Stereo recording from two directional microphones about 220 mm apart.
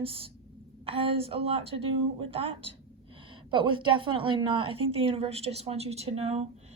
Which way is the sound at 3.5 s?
20° right (ahead or behind).